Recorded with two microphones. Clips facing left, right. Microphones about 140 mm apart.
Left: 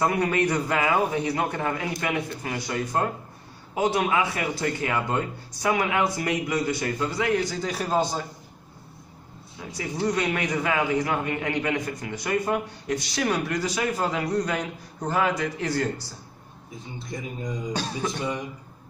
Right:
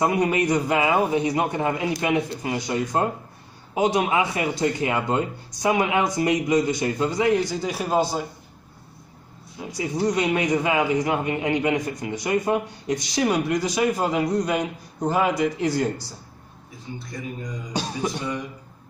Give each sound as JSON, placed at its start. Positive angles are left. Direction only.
{"t": 0.0, "sound": "a man's voice", "side_deg": -15}
{"t": 9.6, "sound": "a man's voice", "side_deg": -20}
{"t": 17.1, "sound": "speech", "side_deg": 20}
{"t": 17.7, "sound": "a man's voice", "side_deg": -15}